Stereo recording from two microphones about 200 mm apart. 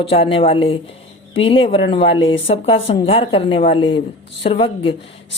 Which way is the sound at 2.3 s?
70° left (ahead or behind).